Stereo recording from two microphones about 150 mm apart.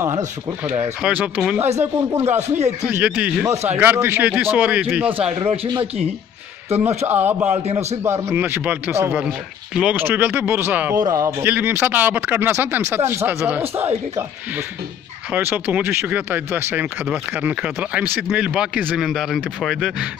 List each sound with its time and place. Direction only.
0.1 s speech: 50° right (ahead or behind)
1.0 s speech: 10° right (ahead or behind)
5.4 s speech: 40° right (ahead or behind)
7.1 s speech: 10° right (ahead or behind)
15.3 s speech: 10° right (ahead or behind)